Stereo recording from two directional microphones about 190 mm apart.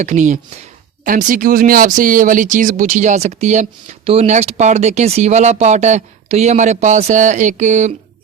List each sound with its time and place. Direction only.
0.0 s speech: 40° right (ahead or behind)